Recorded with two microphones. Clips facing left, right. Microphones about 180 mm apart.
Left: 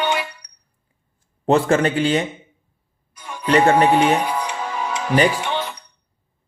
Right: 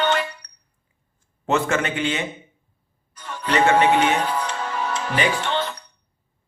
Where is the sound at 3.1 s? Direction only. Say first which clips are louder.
Left 4 dB; 10° left (ahead or behind).